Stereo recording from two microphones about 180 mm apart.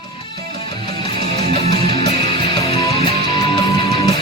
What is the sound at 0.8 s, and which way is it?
Music, 25° left (ahead or behind).